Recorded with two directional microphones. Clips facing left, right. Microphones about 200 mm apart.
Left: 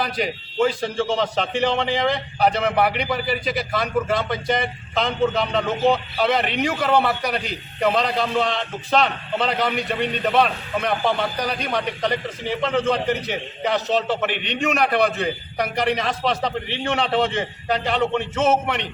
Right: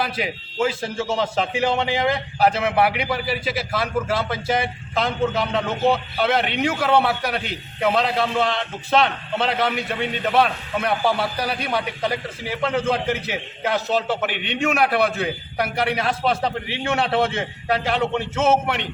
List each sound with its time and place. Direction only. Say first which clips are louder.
0.0 s a man's voice: left 1 dB; 5° right (ahead or behind)